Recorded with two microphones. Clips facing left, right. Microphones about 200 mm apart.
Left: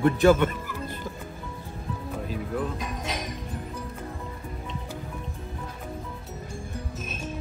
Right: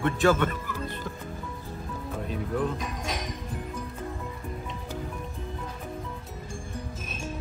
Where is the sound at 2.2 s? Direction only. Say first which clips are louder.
Right 2 dB; centre (ahead or behind).